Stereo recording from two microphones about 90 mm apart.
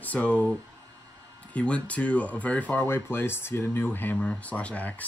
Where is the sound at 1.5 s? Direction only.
15° left (ahead or behind).